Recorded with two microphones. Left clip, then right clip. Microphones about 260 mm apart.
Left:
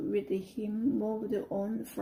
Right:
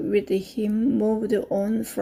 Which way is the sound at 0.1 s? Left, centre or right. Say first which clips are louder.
Right 11 dB; right.